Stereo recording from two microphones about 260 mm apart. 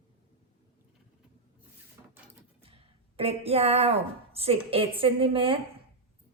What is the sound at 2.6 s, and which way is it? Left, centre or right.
A woman's voice, right.